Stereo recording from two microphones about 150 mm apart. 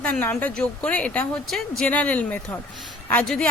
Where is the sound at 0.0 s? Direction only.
10° left (ahead or behind).